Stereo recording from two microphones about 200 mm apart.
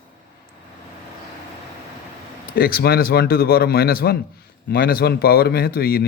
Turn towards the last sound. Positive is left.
turn(degrees=50)  # may be behind; listen again after turning